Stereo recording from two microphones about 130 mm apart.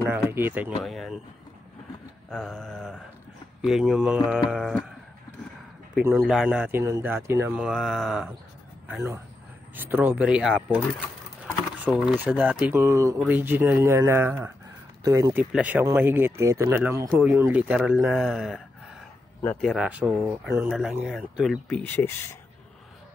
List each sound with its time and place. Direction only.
0.0 s speech: 20° right (ahead or behind)
0.8 s speech: centre (ahead or behind)
2.2 s speech: 5° left (ahead or behind)
6.2 s speech: 5° right (ahead or behind)
6.7 s speech: 20° right (ahead or behind)
7.5 s speech: 5° right (ahead or behind)
9.8 s speech: 15° right (ahead or behind)
11.9 s speech: 5° right (ahead or behind); by 15.3 s 25° right (ahead or behind)
15.5 s speech: 10° right (ahead or behind)
19.6 s speech: 5° right (ahead or behind)
20.6 s speech: 5° right (ahead or behind); by 22.4 s 20° left (ahead or behind)